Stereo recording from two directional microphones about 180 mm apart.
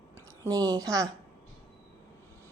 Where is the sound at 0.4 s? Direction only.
20° right (ahead or behind).